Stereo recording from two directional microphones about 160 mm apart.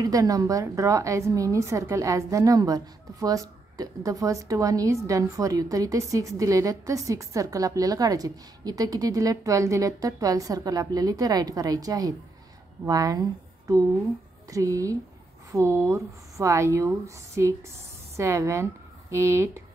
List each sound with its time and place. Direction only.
0.0 s a woman's voice: 20° right (ahead or behind)